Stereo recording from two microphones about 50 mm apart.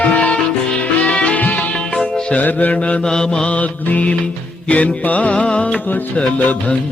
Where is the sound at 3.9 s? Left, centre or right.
Left.